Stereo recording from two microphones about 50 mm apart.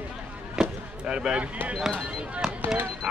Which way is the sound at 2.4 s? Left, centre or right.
Centre.